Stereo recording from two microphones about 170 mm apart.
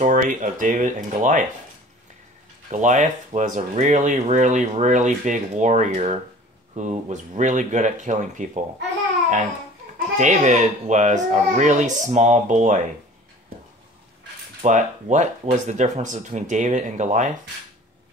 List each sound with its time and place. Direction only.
0.0 s speech: 50° right (ahead or behind)
2.7 s speech: 45° right (ahead or behind)
10.1 s speech: 45° right (ahead or behind)
14.6 s speech: 45° right (ahead or behind)